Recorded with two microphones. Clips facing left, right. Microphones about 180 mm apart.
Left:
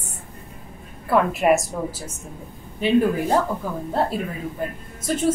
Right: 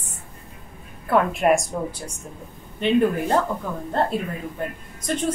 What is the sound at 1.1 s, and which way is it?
A woman's voice, centre (ahead or behind).